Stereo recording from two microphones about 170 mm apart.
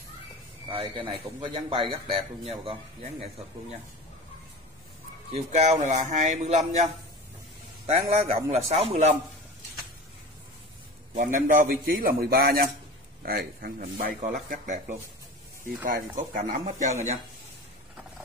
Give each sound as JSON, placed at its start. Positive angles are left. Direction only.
{"t": 0.7, "sound": "a man's voice", "side_deg": -30}
{"t": 5.3, "sound": "a man's voice", "side_deg": -40}
{"t": 11.1, "sound": "speech", "side_deg": -50}